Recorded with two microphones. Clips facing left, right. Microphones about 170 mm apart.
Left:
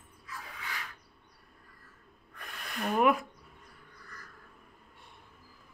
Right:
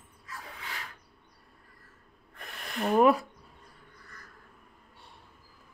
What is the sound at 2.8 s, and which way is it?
Speech, 30° right (ahead or behind).